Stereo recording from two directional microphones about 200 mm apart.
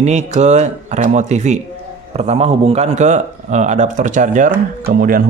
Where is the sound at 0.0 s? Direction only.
35° right (ahead or behind).